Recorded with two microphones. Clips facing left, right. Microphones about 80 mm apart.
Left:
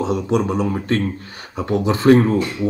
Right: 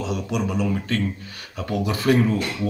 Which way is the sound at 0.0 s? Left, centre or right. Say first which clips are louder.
Left 7 dB; left.